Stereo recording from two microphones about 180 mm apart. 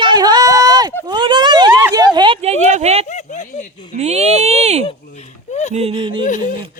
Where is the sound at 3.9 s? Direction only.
40° right (ahead or behind).